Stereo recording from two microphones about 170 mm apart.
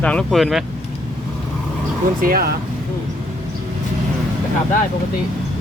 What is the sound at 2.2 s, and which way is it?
Speech, 60° right (ahead or behind).